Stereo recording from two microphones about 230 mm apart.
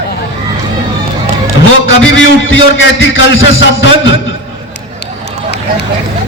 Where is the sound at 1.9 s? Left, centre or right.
Left.